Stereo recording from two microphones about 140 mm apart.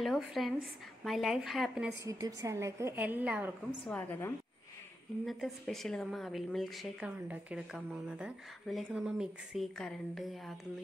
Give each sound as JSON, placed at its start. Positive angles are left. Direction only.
{"t": 0.0, "sound": "speech", "side_deg": 0}
{"t": 2.0, "sound": "a woman's voice", "side_deg": -25}
{"t": 3.8, "sound": "a woman's voice", "side_deg": 10}
{"t": 5.2, "sound": "speech", "side_deg": 0}